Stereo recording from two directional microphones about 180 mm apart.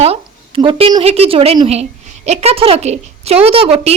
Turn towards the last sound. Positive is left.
turn(degrees=-30)  # may be behind; listen again after turning